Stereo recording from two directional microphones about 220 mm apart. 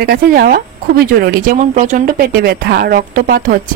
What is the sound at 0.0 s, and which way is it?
Speech, 40° right (ahead or behind).